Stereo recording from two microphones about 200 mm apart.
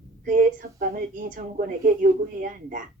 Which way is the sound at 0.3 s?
45° right (ahead or behind).